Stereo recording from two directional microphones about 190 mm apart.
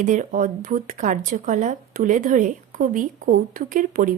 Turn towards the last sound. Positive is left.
turn(degrees=-45)  # may be behind; listen again after turning